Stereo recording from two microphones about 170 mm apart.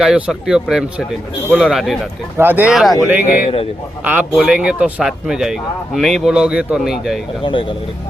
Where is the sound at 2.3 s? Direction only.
10° right (ahead or behind).